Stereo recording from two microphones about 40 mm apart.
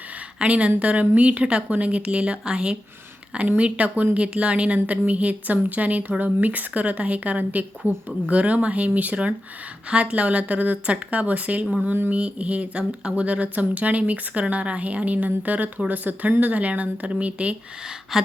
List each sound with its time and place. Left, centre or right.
0.3 s a woman's voice: right
3.6 s a woman's voice: right
4.2 s a woman's voice: right
18.1 s gasp: centre